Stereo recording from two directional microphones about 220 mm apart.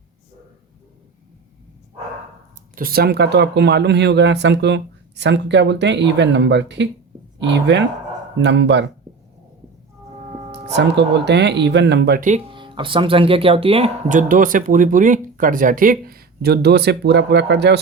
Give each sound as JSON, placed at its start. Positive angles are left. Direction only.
{"t": 2.7, "sound": "speech", "side_deg": -40}
{"t": 10.7, "sound": "speech", "side_deg": -50}
{"t": 12.5, "sound": "speech", "side_deg": -20}